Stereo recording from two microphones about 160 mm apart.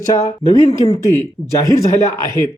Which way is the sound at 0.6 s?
40° left (ahead or behind).